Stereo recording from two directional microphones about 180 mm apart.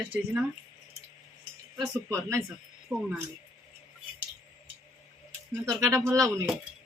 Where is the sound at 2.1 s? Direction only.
15° right (ahead or behind).